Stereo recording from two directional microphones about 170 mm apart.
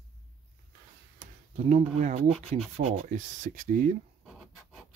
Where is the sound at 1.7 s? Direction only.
40° right (ahead or behind).